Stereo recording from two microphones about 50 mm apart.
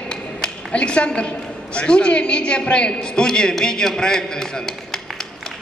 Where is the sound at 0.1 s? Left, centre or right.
Left.